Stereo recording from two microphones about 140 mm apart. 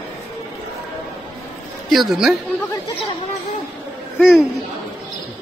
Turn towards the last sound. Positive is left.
turn(degrees=0)  # may be behind; listen again after turning